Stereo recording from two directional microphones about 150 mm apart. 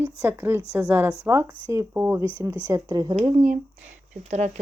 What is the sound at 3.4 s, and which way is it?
Speech, 55° right (ahead or behind).